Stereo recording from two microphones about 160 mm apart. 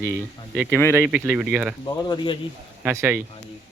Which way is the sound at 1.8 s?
25° left (ahead or behind).